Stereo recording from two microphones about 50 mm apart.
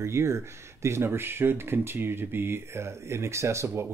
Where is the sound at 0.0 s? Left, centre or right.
Right.